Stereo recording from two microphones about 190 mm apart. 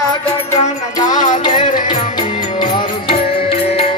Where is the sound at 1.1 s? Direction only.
40° left (ahead or behind).